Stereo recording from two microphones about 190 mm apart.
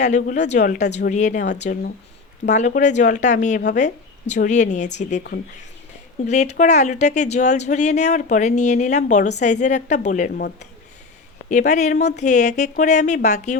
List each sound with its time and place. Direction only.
0.0 s speech: 40° left (ahead or behind)
6.2 s speech: 35° left (ahead or behind)
11.4 s speech: 40° left (ahead or behind)